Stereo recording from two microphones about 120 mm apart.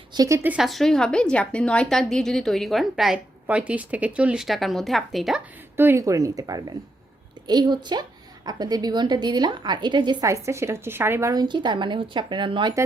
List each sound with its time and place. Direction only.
0.1 s a woman's voice: 30° right (ahead or behind)
0.4 s a woman's voice: 5° right (ahead or behind)
5.7 s a woman's voice: 20° right (ahead or behind); by 10.2 s 40° right (ahead or behind)
10.2 s speech: 25° right (ahead or behind)
11.4 s a woman's voice: 40° right (ahead or behind)